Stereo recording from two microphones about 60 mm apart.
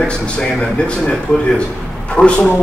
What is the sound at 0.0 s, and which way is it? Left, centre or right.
Speech, centre.